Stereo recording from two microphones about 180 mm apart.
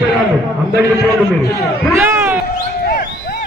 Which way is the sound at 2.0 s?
10° right (ahead or behind).